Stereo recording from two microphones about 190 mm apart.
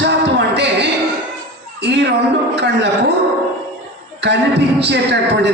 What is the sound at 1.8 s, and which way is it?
A man's voice, 65° right (ahead or behind).